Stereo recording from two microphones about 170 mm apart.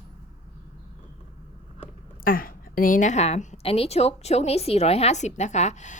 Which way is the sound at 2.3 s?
55° left (ahead or behind).